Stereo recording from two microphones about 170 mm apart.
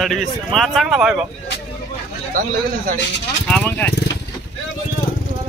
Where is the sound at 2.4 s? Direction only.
55° right (ahead or behind).